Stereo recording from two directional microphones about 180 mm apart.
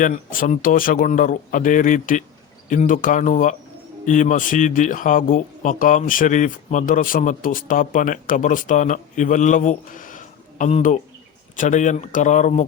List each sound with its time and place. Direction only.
0.0 s speech: 50° left (ahead or behind)